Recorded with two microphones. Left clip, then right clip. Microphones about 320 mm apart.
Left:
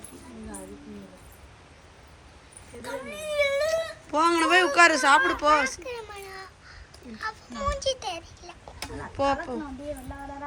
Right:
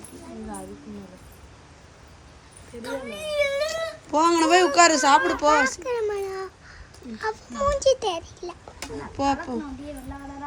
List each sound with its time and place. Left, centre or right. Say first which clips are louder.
2.8 s a child's voice: right 3 dB; centre
5.8 s a sound: right 11 dB; right
7.6 s a child's voice: right 8 dB; right
8.8 s speech: right 1 dB; centre